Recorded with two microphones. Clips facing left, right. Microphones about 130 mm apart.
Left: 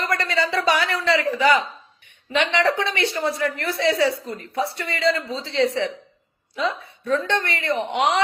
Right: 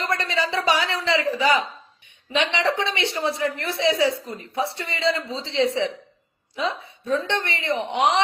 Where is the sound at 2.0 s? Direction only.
55° left (ahead or behind).